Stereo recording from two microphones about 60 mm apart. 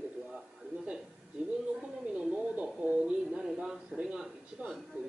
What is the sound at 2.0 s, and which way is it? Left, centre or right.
Speech, centre.